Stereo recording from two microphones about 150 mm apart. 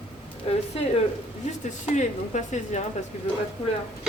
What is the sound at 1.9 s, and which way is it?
Speech, 55° left (ahead or behind).